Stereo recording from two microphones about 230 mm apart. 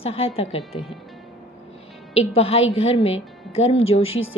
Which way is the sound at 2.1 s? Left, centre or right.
Left.